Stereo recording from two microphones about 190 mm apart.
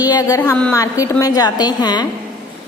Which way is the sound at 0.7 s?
15° left (ahead or behind).